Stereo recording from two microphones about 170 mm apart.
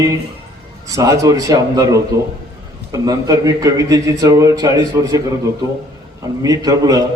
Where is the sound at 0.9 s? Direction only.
20° right (ahead or behind).